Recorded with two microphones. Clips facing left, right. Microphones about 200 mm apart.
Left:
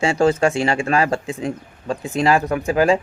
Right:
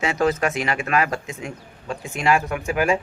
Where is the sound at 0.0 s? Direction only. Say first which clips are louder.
Left 5 dB; 30° left (ahead or behind).